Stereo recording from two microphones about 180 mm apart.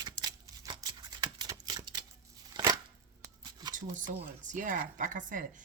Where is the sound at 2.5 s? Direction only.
25° right (ahead or behind).